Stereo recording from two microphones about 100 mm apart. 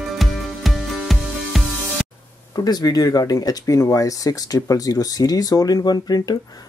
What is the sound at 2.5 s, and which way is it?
Speech, 40° left (ahead or behind).